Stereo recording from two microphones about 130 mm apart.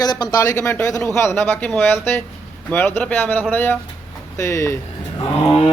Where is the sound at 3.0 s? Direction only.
10° left (ahead or behind).